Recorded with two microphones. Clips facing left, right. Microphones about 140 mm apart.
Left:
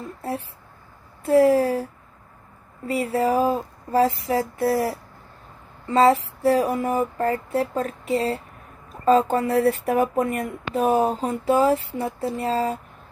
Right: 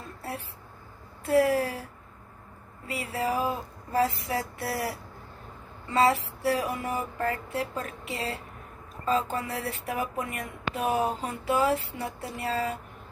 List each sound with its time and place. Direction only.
1.2 s speech: 30° left (ahead or behind)
2.9 s speech: 40° left (ahead or behind)
5.9 s speech: 35° left (ahead or behind)